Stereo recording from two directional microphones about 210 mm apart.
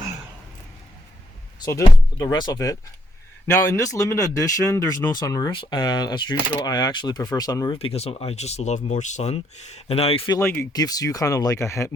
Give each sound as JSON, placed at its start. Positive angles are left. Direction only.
{"t": 1.6, "sound": "speech", "side_deg": 15}
{"t": 10.3, "sound": "speech", "side_deg": 10}